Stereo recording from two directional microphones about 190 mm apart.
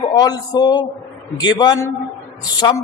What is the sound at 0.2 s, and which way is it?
A man's voice, 20° left (ahead or behind).